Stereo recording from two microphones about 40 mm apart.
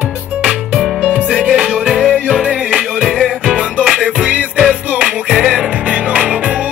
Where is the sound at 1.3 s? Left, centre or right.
Right.